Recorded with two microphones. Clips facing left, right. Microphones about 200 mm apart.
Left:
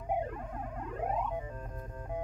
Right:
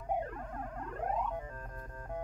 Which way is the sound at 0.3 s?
5° left (ahead or behind).